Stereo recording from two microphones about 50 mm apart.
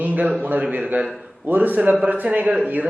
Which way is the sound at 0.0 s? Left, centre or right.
Right.